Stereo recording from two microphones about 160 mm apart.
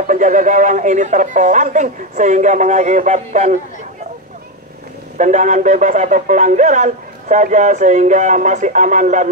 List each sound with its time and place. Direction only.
0.0 s speech: 55° right (ahead or behind)
5.1 s speech: 50° right (ahead or behind)